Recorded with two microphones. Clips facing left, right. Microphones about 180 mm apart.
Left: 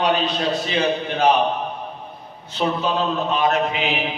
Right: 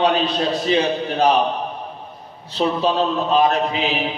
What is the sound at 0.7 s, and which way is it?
Speech, 35° right (ahead or behind).